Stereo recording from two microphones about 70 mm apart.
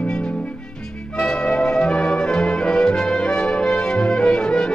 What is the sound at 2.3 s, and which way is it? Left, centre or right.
Music, centre.